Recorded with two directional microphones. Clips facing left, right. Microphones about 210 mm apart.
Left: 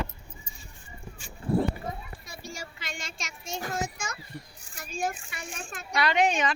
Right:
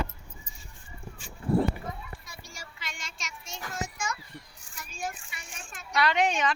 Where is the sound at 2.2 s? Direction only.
25° left (ahead or behind).